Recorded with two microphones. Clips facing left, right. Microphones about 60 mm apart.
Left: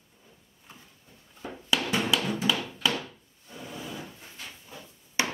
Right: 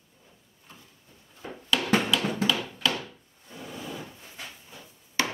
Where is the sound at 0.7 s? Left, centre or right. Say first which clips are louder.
Even; centre.